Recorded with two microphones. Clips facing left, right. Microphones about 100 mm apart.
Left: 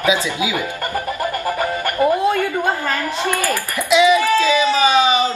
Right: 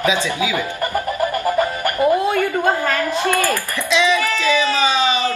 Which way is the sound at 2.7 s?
15° left (ahead or behind).